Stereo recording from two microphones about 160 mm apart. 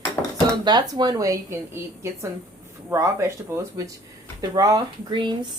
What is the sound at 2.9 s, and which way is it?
Speech, 15° right (ahead or behind).